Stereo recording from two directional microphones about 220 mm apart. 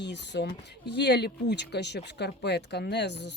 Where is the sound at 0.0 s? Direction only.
50° left (ahead or behind).